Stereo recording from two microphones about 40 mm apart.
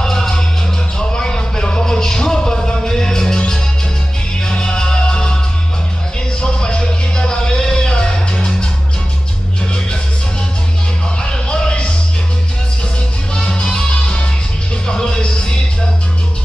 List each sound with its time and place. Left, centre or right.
0.0 s music: centre
6.4 s music: left
11.2 s music: left
13.3 s music: left